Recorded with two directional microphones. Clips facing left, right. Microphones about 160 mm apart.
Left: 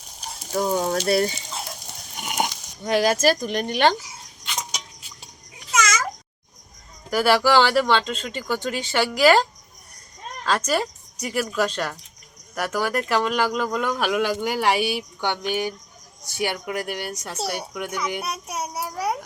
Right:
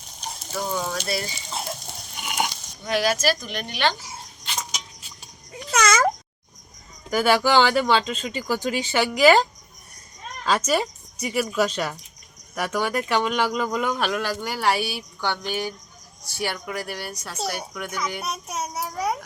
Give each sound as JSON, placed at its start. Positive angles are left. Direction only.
{"t": 0.5, "sound": "speech", "side_deg": 45}
{"t": 2.2, "sound": "speech", "side_deg": 40}
{"t": 3.9, "sound": "a sound", "side_deg": -30}
{"t": 5.7, "sound": "meow", "side_deg": -60}
{"t": 7.1, "sound": "speech", "side_deg": 0}
{"t": 14.0, "sound": "speech", "side_deg": 15}